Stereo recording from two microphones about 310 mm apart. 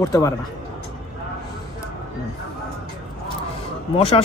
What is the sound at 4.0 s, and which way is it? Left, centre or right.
Speech, centre.